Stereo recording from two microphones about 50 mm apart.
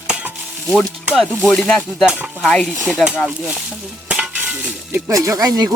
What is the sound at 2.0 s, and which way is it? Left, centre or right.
Speech, right.